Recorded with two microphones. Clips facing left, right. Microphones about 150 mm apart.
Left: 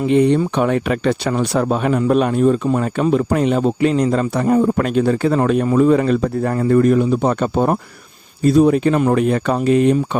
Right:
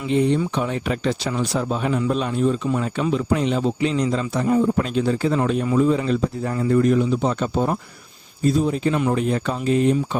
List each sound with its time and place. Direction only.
0.1 s a man's voice: 65° left (ahead or behind)